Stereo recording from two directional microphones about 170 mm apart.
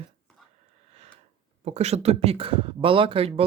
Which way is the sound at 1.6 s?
40° right (ahead or behind).